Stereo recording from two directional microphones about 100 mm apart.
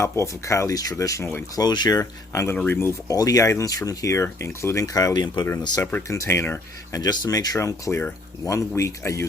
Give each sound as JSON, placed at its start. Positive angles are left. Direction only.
{"t": 0.0, "sound": "speech", "side_deg": 30}
{"t": 1.5, "sound": "speech", "side_deg": 45}
{"t": 3.1, "sound": "speech", "side_deg": 35}
{"t": 6.1, "sound": "speech", "side_deg": 30}
{"t": 7.0, "sound": "speech", "side_deg": 40}